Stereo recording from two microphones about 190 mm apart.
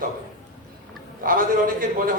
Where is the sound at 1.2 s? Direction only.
45° right (ahead or behind).